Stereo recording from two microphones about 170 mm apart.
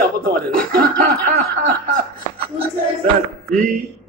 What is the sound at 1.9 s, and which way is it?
Speech, 60° right (ahead or behind).